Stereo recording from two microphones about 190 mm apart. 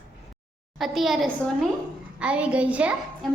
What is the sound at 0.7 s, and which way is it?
A woman's voice, centre (ahead or behind).